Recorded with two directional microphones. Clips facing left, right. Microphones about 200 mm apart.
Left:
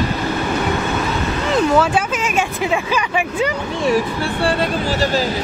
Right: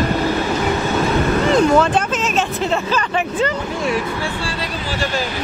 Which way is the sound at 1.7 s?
10° left (ahead or behind).